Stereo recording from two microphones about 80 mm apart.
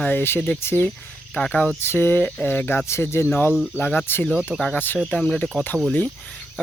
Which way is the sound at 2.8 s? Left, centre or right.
Left.